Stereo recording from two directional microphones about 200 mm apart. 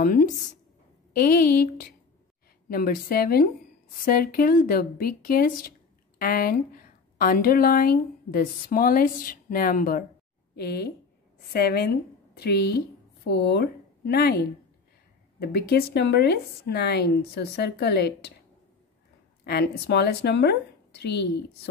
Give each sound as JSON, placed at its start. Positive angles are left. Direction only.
{"t": 0.0, "sound": "a woman's voice", "side_deg": 45}
{"t": 19.4, "sound": "speech", "side_deg": 55}